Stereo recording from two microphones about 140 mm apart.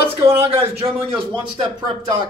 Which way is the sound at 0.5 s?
45° right (ahead or behind).